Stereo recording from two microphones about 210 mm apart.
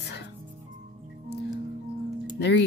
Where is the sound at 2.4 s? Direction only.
55° left (ahead or behind).